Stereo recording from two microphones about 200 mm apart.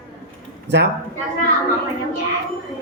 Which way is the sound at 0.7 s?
60° right (ahead or behind).